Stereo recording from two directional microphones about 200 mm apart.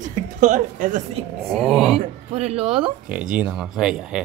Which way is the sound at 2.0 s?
30° right (ahead or behind).